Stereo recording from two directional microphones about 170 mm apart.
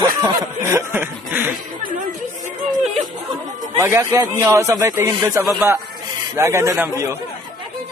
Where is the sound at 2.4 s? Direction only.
40° right (ahead or behind).